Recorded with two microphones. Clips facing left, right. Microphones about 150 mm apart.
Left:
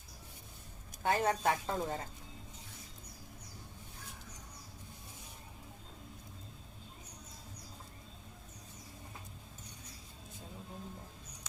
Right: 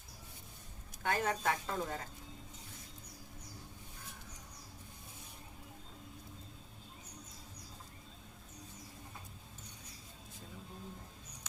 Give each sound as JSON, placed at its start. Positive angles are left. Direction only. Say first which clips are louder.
{"t": 1.0, "sound": "speech", "louder": "left 3 dB", "side_deg": 30}